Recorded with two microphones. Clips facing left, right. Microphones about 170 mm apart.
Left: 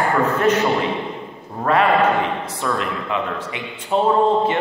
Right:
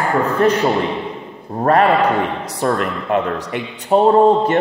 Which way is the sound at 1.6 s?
40° right (ahead or behind).